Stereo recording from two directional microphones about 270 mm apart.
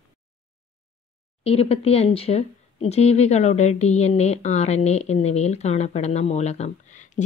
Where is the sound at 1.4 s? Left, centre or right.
Left.